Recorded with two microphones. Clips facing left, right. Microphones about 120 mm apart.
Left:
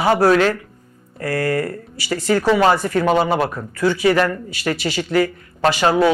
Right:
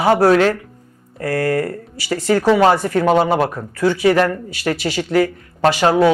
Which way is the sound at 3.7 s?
50° right (ahead or behind).